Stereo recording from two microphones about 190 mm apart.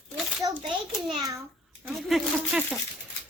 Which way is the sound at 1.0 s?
20° right (ahead or behind).